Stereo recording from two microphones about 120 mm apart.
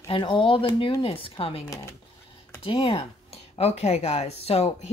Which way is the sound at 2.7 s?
50° left (ahead or behind).